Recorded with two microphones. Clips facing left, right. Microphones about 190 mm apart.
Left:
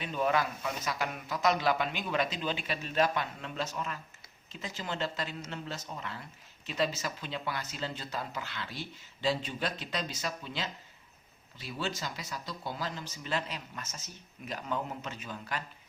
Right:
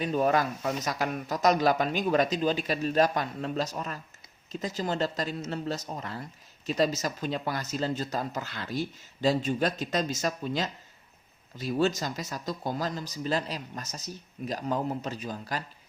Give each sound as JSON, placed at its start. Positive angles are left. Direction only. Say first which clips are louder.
{"t": 0.0, "sound": "speech", "louder": "right 5 dB", "side_deg": -40}